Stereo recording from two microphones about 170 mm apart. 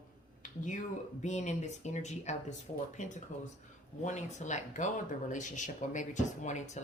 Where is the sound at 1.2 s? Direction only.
45° left (ahead or behind).